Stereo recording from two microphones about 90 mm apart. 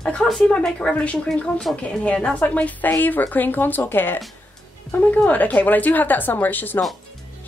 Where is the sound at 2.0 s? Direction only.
15° left (ahead or behind).